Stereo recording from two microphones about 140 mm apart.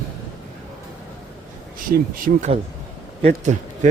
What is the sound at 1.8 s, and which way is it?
Speech, 85° right.